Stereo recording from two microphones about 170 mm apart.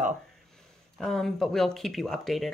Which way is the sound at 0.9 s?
Centre (ahead or behind).